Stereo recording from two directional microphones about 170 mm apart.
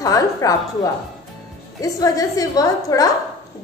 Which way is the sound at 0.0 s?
20° left (ahead or behind).